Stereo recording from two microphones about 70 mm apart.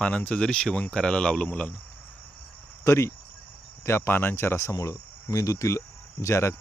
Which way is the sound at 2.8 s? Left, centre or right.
Left.